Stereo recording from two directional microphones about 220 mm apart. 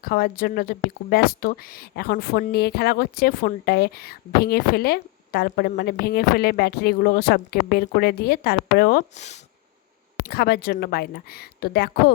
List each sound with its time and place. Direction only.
0.0 s speech: 45° left (ahead or behind)
9.1 s speech: 30° left (ahead or behind)
10.2 s speech: 45° left (ahead or behind)